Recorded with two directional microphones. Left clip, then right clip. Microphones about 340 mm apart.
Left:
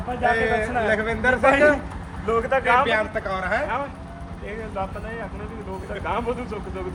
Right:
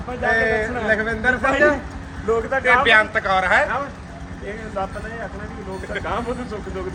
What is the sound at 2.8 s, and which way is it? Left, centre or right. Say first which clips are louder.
Speech: right 7 dB; centre.